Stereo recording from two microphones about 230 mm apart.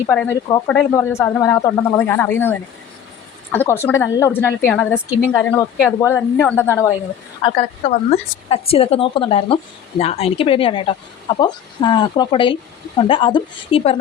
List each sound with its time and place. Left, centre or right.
0.1 s speech: centre
7.4 s a woman's voice: left